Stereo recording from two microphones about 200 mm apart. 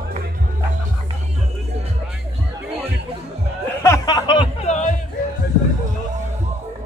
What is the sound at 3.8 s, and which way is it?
Music, 15° left (ahead or behind).